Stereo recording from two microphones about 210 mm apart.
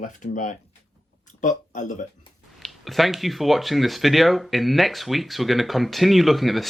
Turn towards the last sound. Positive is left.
turn(degrees=0)  # may be behind; listen again after turning